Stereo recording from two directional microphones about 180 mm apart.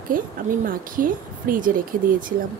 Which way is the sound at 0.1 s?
50° right (ahead or behind).